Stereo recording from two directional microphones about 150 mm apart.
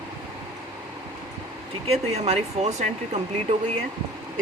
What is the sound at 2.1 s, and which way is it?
Speech, 45° right (ahead or behind).